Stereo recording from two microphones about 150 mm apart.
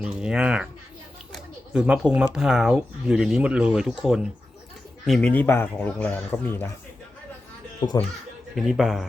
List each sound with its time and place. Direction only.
0.0 s speech: 5° right (ahead or behind)
5.3 s speech: 15° left (ahead or behind)
7.9 s speech: 25° left (ahead or behind)
8.5 s speech: centre (ahead or behind)